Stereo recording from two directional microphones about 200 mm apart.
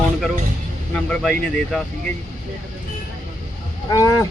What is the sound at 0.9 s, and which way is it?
Speech, 5° left (ahead or behind).